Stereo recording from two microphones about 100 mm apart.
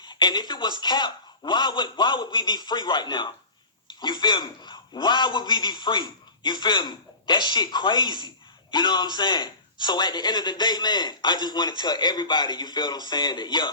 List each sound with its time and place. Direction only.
0.0 s a man's voice: 50° left (ahead or behind)